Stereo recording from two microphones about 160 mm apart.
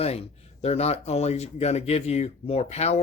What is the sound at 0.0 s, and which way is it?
Speech, 40° left (ahead or behind).